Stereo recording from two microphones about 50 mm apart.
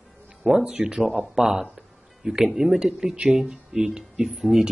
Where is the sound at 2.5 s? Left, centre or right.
Centre.